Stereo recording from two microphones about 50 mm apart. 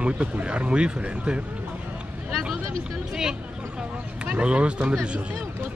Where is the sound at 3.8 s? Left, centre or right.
Right.